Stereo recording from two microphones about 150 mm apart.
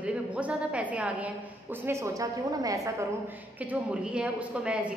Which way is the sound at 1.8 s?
20° right (ahead or behind).